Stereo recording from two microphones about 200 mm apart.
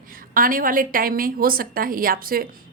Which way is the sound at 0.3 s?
45° right (ahead or behind).